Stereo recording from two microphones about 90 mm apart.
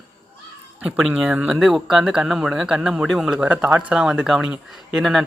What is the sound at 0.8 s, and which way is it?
Speech, 5° right (ahead or behind).